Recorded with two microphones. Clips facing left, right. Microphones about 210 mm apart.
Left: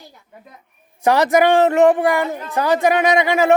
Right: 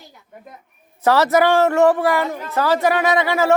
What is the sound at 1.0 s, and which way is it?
Speech, 15° left (ahead or behind).